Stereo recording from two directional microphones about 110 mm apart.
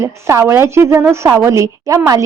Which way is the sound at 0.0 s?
25° right (ahead or behind).